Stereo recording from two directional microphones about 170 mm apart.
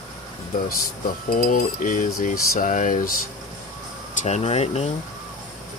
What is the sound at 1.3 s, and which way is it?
Cutlery, 50° left (ahead or behind).